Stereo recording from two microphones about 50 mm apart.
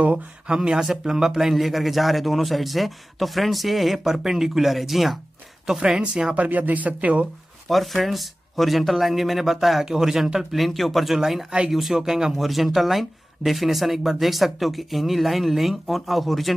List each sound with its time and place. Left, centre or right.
0.5 s speech: centre
5.7 s speech: centre
6.3 s speech: right
7.6 s speech: centre